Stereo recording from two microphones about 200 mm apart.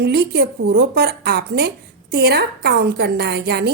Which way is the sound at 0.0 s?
55° right (ahead or behind).